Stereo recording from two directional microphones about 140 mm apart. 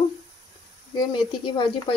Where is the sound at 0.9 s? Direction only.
35° left (ahead or behind).